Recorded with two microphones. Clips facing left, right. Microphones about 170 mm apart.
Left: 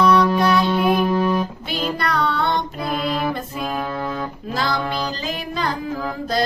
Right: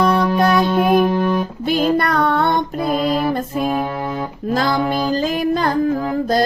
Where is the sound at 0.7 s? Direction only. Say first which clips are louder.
Right 3 dB; centre (ahead or behind).